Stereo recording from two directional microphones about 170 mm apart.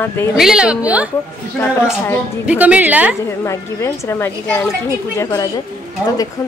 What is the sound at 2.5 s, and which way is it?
Speech, 10° right (ahead or behind).